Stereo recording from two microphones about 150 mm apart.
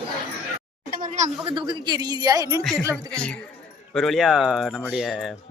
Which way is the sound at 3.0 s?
5° left (ahead or behind).